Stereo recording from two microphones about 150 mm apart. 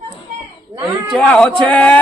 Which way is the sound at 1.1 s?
5° left (ahead or behind).